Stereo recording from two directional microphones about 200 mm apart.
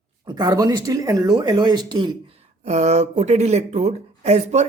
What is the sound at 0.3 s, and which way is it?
Speech, 20° right (ahead or behind).